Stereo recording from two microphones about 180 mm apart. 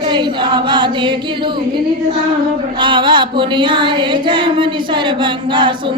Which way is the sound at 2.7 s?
25° right (ahead or behind).